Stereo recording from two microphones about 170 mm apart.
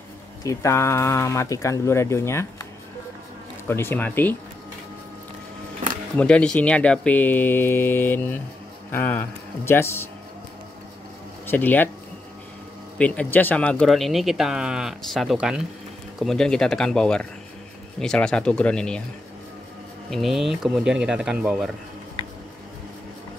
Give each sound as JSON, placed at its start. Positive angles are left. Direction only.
{"t": 0.4, "sound": "speech", "side_deg": 20}
{"t": 6.1, "sound": "speech", "side_deg": 5}
{"t": 11.4, "sound": "speech", "side_deg": 10}
{"t": 12.9, "sound": "speech", "side_deg": 5}
{"t": 20.1, "sound": "speech", "side_deg": 0}